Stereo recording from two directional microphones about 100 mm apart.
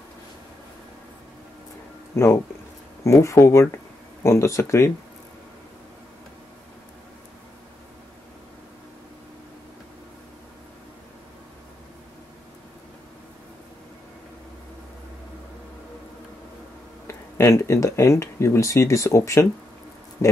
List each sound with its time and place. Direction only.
3.0 s speech: 30° left (ahead or behind)
17.1 s speech: 30° left (ahead or behind)